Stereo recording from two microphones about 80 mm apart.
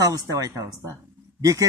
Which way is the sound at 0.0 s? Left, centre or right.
Right.